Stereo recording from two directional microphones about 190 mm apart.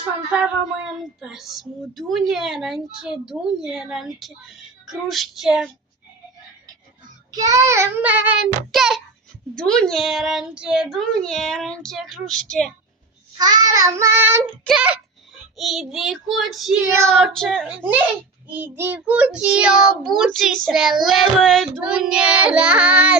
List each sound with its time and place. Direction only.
1.2 s child singing: centre (ahead or behind)
7.3 s child singing: 20° right (ahead or behind); by 12.7 s 5° left (ahead or behind)
13.3 s child singing: 20° right (ahead or behind)
14.6 s child singing: centre (ahead or behind)
16.8 s child singing: 15° right (ahead or behind)
17.1 s child singing: centre (ahead or behind)